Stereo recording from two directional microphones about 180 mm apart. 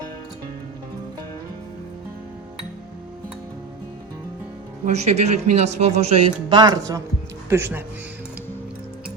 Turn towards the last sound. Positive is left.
turn(degrees=-15)  # may be behind; listen again after turning